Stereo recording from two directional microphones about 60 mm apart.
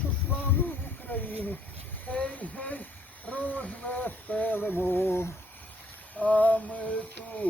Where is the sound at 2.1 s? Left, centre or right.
Left.